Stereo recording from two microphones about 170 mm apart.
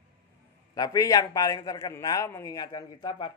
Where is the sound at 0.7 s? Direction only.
20° left (ahead or behind).